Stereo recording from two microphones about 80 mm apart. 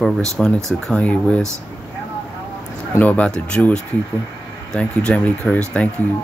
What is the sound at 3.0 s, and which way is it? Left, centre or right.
Speech, centre.